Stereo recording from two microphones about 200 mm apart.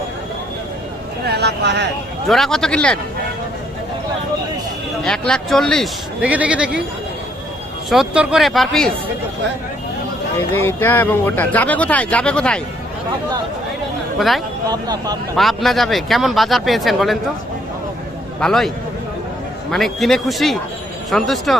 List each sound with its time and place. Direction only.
1.2 s speech: 55° right (ahead or behind)
2.2 s speech: centre (ahead or behind)
5.0 s speech: 5° left (ahead or behind)
7.9 s speech: 5° right (ahead or behind)
10.5 s speech: 10° left (ahead or behind)
14.2 s speech: centre (ahead or behind)
14.7 s speech: 20° right (ahead or behind)
15.4 s speech: centre (ahead or behind)
18.3 s speech: centre (ahead or behind)
19.7 s speech: centre (ahead or behind)